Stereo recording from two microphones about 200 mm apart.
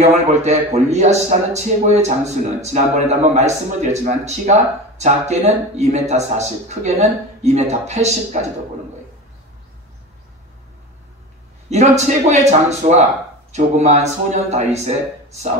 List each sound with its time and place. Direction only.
0.0 s a man's voice: 35° right (ahead or behind)
11.7 s a man's voice: 35° right (ahead or behind)